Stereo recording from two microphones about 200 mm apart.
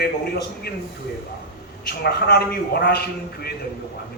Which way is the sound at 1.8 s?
55° left (ahead or behind).